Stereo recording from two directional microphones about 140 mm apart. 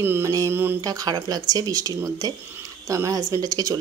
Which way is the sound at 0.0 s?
15° right (ahead or behind).